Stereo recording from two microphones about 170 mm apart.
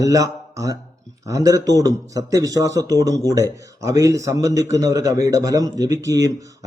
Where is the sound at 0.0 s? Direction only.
20° right (ahead or behind).